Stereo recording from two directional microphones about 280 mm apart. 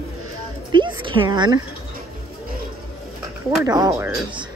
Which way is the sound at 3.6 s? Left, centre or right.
Centre.